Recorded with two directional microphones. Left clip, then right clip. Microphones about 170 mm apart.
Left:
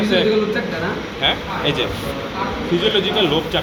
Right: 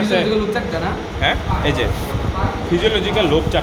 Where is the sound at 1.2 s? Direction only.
45° right (ahead or behind).